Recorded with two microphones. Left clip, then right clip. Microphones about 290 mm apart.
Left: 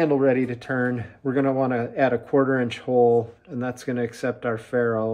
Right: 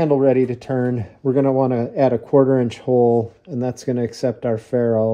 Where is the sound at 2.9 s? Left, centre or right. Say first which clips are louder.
Right 2 dB; right.